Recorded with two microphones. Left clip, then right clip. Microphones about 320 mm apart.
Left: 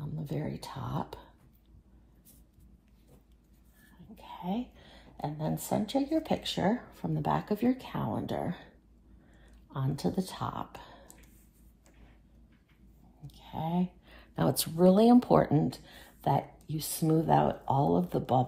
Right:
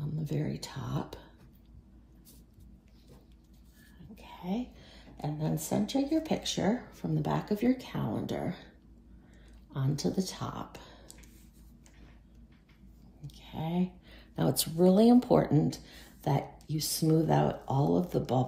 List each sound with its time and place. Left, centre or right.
0.0 s speech: centre
4.1 s a sound: centre
5.2 s speech: left
9.7 s speech: centre
13.3 s speech: centre